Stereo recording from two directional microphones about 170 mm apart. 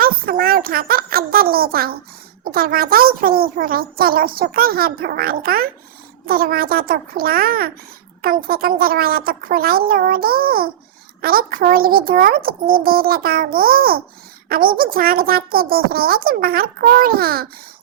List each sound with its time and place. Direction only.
0.0 s a woman's voice: 60° right (ahead or behind)